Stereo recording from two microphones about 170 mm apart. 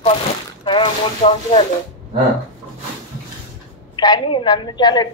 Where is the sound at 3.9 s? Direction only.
25° left (ahead or behind).